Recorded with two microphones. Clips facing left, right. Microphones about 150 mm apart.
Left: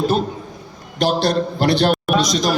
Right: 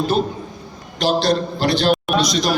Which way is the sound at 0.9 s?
55° left (ahead or behind).